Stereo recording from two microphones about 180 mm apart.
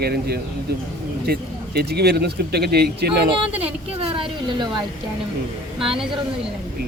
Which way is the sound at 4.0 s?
30° right (ahead or behind).